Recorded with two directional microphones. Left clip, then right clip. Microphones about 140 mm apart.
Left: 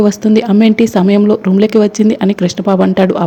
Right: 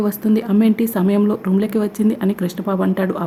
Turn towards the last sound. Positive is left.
turn(degrees=35)  # may be behind; listen again after turning